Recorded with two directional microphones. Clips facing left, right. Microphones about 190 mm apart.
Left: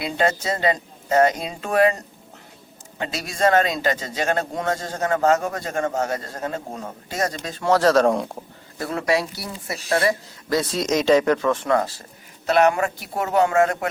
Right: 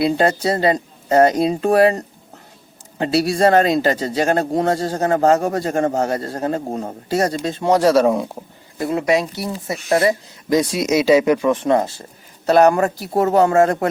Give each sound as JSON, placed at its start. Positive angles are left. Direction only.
{"t": 0.0, "sound": "a man's voice", "side_deg": -35}
{"t": 8.8, "sound": "speech", "side_deg": -20}
{"t": 12.5, "sound": "a man's voice", "side_deg": -35}